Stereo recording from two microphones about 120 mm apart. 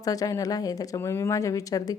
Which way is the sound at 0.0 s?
30° left (ahead or behind).